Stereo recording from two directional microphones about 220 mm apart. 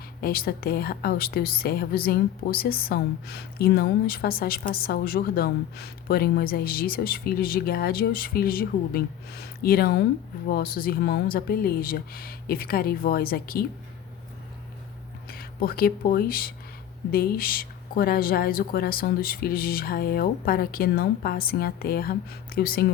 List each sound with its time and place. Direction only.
0.2 s speech: 40° left (ahead or behind)
15.3 s speech: 40° left (ahead or behind)